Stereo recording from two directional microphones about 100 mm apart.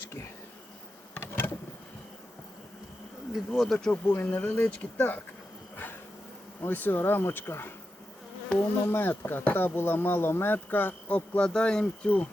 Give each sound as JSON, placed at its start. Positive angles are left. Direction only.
{"t": 1.1, "sound": "insect", "side_deg": 20}
{"t": 3.3, "sound": "speech", "side_deg": 0}
{"t": 3.9, "sound": "speech", "side_deg": 20}
{"t": 6.6, "sound": "speech", "side_deg": 20}
{"t": 8.9, "sound": "speech", "side_deg": 20}